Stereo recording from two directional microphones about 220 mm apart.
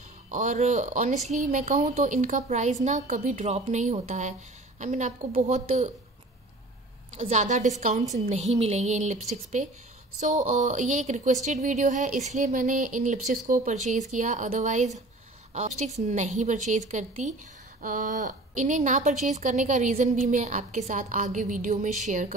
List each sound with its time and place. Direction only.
0.3 s speech: 35° right (ahead or behind)
7.2 s speech: 35° right (ahead or behind)
10.2 s speech: 35° right (ahead or behind)
16.0 s speech: 30° right (ahead or behind)